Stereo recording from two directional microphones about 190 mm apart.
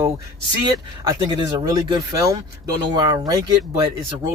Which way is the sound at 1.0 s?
25° right (ahead or behind).